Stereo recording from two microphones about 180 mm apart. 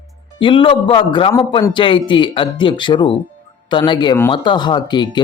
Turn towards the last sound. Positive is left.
turn(degrees=25)  # may be behind; listen again after turning